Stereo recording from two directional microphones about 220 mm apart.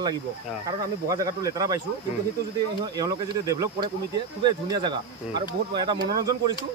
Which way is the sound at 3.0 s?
15° right (ahead or behind).